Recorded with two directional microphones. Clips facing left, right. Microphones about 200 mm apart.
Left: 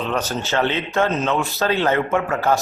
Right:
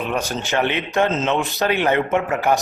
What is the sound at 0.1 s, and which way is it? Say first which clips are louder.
A man's voice: even; 15° right (ahead or behind).